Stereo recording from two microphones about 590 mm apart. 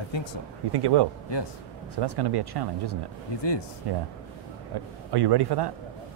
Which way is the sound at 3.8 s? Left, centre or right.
Right.